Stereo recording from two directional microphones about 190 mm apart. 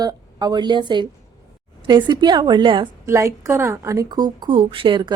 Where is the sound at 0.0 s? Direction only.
20° right (ahead or behind).